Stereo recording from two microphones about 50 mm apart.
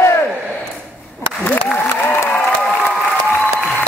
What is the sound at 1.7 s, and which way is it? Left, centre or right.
Applause, left.